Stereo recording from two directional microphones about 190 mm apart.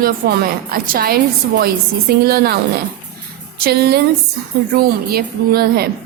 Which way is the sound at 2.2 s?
55° right (ahead or behind).